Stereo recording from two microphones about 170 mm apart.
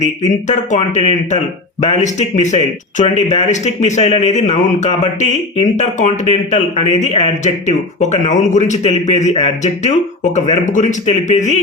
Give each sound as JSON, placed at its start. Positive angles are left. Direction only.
{"t": 0.4, "sound": "speech", "side_deg": 45}